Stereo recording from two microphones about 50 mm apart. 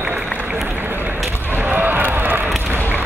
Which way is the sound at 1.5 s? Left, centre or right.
Right.